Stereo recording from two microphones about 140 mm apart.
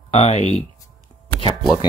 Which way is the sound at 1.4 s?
30° left (ahead or behind).